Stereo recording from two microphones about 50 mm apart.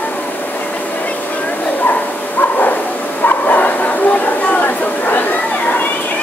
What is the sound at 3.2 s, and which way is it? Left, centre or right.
Bow-wow, left.